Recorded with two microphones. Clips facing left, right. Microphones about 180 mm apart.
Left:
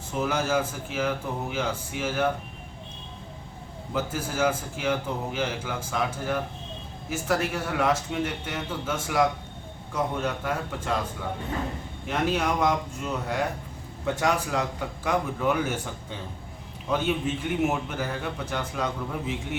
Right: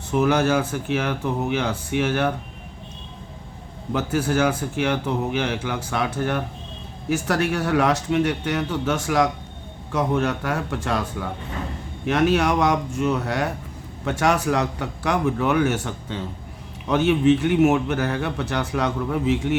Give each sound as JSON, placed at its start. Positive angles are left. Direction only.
{"t": 0.1, "sound": "a man's voice", "side_deg": -70}
{"t": 3.9, "sound": "a man's voice", "side_deg": -70}